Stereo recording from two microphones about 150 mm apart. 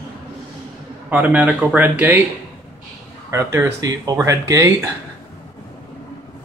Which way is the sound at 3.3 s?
20° right (ahead or behind).